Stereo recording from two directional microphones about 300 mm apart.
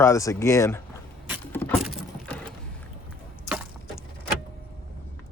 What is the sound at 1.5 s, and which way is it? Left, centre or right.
Patter, centre.